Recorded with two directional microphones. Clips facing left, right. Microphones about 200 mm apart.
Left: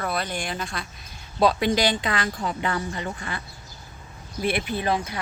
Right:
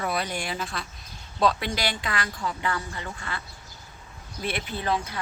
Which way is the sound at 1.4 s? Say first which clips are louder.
Left 5 dB; 15° left (ahead or behind).